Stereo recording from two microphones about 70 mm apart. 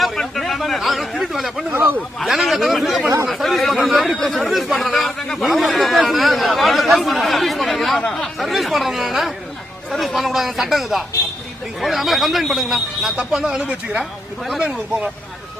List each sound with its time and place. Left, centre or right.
0.0 s speech: centre
1.7 s speech: right
2.1 s a man's voice: centre
14.7 s speech: centre